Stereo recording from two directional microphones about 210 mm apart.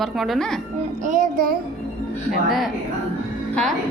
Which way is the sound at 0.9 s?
35° right (ahead or behind).